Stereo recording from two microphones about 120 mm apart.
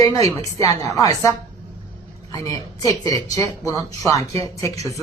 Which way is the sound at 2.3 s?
30° left (ahead or behind).